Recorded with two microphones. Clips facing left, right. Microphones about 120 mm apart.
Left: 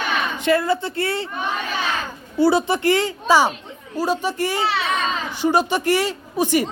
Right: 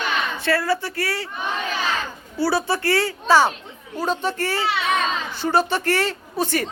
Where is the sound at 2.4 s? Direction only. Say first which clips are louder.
Left 4 dB; 20° left (ahead or behind).